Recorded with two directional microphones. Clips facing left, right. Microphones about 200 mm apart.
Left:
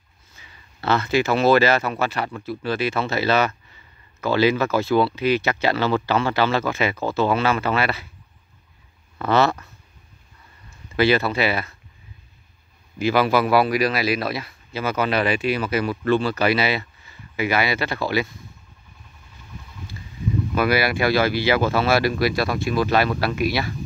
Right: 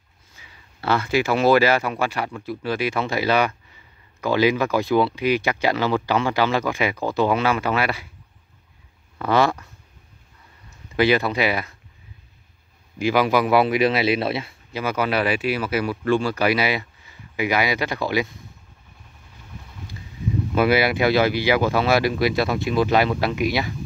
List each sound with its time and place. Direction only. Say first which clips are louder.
0.4 s speech: left 1 dB; 10° right (ahead or behind)
9.2 s speech: even; 10° right (ahead or behind)
11.0 s speech: even; 15° right (ahead or behind)
13.0 s speech: even; 15° right (ahead or behind)
14.7 s speech: even; 15° right (ahead or behind)
20.5 s speech: right 2 dB; 20° right (ahead or behind)